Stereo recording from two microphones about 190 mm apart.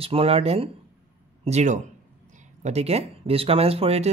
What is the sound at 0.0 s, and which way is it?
A man's voice, 30° right (ahead or behind).